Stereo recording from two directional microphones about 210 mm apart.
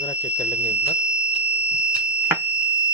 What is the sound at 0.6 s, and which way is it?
Speech, 10° right (ahead or behind).